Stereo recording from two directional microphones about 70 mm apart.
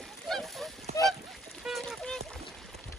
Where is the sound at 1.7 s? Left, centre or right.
Centre.